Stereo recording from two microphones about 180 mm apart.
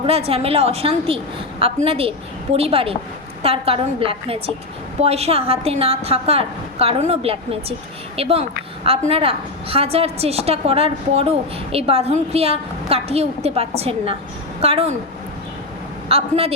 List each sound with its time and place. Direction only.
0.0 s a woman's voice: 35° right (ahead or behind)
16.0 s a woman's voice: 35° right (ahead or behind)